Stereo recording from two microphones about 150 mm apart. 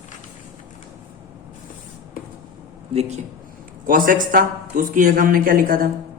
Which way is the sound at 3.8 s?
65° right (ahead or behind).